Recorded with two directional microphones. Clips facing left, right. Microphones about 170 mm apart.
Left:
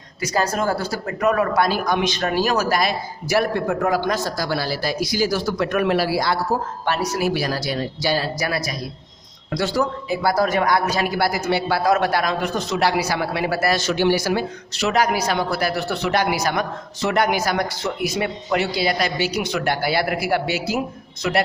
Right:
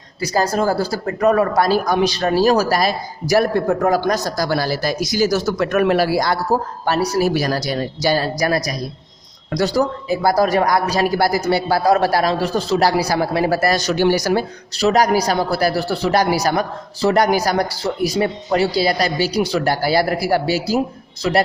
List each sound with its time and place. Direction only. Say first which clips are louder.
0.2 s a man's voice: right 3 dB; 35° right (ahead or behind)